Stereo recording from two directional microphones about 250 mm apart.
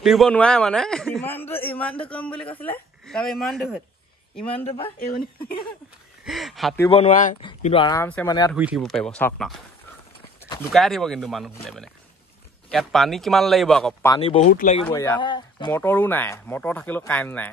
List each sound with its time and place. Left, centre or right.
0.0 s a man's voice: centre
4.5 s speech: left
6.2 s a man's voice: centre
6.9 s speech: left
7.4 s speech: left
8.5 s a man's voice: centre
10.7 s a man's voice: centre
14.0 s speech: centre
14.9 s speech: centre